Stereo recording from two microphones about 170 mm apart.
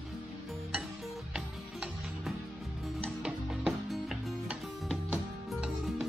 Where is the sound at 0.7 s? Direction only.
5° right (ahead or behind).